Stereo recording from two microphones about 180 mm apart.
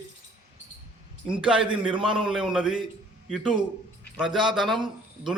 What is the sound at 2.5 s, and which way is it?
A man's voice, 5° right (ahead or behind).